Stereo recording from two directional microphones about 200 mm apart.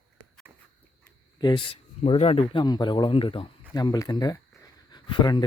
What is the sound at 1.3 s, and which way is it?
A man's voice, 20° left (ahead or behind).